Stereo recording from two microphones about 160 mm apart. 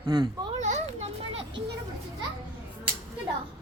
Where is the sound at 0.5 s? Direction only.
45° right (ahead or behind).